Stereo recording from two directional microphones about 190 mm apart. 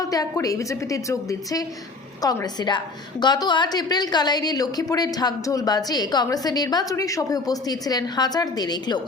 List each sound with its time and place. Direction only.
0.0 s a woman's voice: 20° left (ahead or behind)